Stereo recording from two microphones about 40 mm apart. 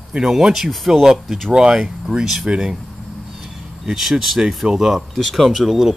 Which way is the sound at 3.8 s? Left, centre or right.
Centre.